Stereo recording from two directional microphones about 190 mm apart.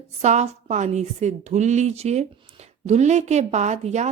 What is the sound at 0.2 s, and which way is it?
A woman's voice, 35° right (ahead or behind).